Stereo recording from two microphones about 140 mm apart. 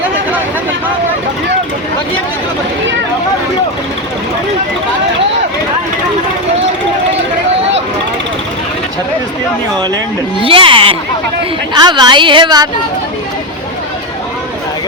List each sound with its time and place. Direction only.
10.4 s a woman's voice: 40° right (ahead or behind)